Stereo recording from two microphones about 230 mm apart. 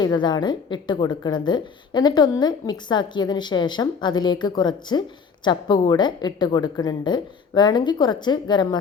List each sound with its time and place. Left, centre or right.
0.0 s a woman's voice: centre